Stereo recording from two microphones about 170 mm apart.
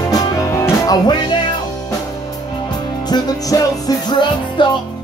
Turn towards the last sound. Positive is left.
turn(degrees=25)  # may be behind; listen again after turning